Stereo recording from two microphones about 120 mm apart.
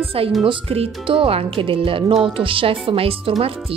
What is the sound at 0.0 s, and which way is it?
Speech, 50° right (ahead or behind).